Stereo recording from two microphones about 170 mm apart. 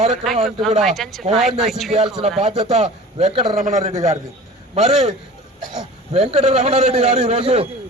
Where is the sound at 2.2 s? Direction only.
40° right (ahead or behind).